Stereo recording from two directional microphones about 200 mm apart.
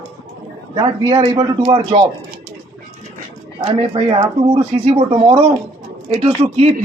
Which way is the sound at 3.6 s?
25° right (ahead or behind).